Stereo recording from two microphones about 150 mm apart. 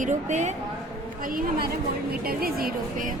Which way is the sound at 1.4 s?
90° right.